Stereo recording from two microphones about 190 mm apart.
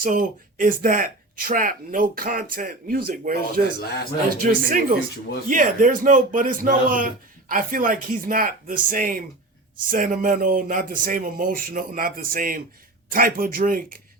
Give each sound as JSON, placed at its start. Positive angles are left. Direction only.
{"t": 0.0, "sound": "a man's voice", "side_deg": -45}